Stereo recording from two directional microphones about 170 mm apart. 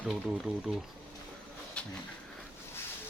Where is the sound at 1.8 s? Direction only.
5° left (ahead or behind).